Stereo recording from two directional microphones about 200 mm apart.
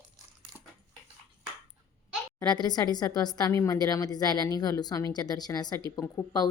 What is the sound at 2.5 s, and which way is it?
A woman's voice, 20° left (ahead or behind).